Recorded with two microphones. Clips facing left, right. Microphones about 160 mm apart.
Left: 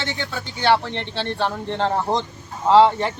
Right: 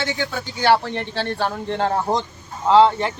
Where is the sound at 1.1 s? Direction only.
25° left (ahead or behind).